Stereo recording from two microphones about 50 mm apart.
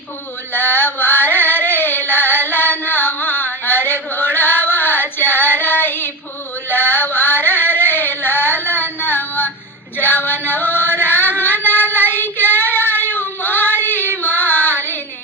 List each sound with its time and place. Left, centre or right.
0.5 s carnatic music: left
6.7 s a sound: left
10.0 s music: left